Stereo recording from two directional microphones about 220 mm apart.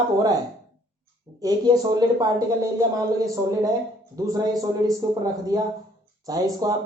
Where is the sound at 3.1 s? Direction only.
15° right (ahead or behind).